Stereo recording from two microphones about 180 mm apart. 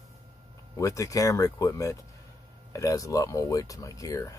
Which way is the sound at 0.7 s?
15° left (ahead or behind).